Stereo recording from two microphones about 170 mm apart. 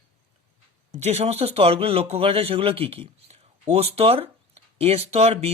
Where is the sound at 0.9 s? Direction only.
40° right (ahead or behind).